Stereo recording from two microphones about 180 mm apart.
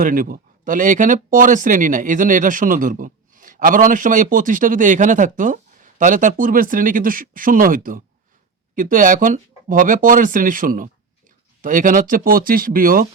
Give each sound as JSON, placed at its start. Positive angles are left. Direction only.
{"t": 0.0, "sound": "speech", "side_deg": -50}